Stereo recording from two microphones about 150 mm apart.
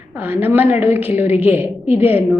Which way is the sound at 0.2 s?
15° right (ahead or behind).